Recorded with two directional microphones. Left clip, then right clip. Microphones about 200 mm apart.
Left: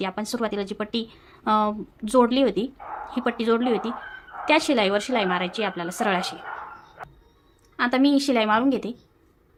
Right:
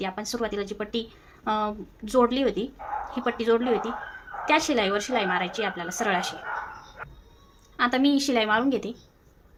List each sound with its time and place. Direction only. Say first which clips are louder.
0.0 s speech: left 2 dB; 35° left (ahead or behind)
7.8 s a woman's voice: left 2 dB; 30° left (ahead or behind)